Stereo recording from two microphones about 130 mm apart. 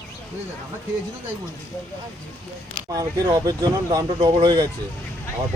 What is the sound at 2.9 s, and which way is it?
Speech, 25° right (ahead or behind).